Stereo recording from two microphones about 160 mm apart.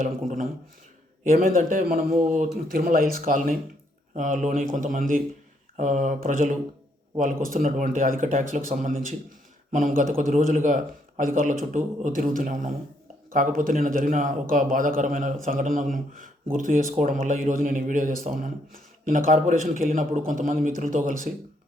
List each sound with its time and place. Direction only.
0.0 s speech: 55° right (ahead or behind)